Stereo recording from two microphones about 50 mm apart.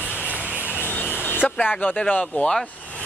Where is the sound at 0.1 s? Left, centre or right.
Left.